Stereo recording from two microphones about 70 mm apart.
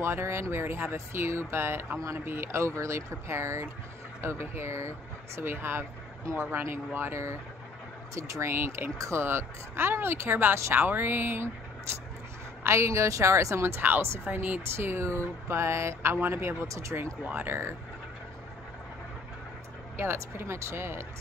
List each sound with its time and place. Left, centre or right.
0.0 s a woman's voice: right
8.9 s speech: right
9.2 s a woman's voice: right
12.6 s a woman's voice: right
20.0 s a woman's voice: right